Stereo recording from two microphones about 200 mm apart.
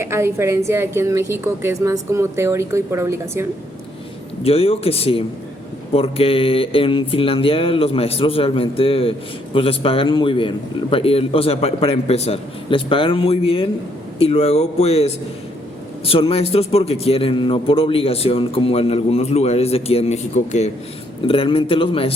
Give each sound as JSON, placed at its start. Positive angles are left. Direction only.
{"t": 0.0, "sound": "a woman's voice", "side_deg": -15}
{"t": 4.4, "sound": "a man's voice", "side_deg": 30}